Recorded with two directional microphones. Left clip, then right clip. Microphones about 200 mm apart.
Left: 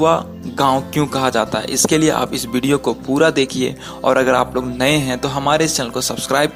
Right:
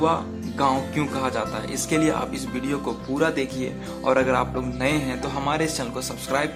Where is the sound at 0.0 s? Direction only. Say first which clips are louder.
Left 7 dB; 30° left (ahead or behind).